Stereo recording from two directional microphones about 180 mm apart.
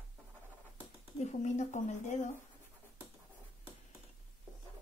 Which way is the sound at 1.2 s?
40° left (ahead or behind).